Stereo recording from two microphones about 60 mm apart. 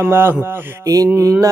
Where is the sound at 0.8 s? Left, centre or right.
Right.